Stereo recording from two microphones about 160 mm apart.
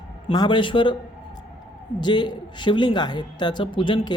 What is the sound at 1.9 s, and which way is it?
A woman's voice, 30° left (ahead or behind).